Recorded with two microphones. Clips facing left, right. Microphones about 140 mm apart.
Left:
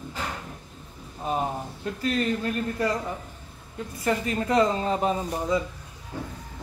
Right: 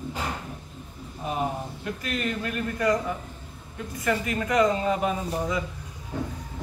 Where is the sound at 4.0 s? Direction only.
30° left (ahead or behind).